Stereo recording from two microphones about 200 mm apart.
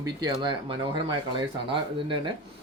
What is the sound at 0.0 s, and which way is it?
Speech, 20° right (ahead or behind).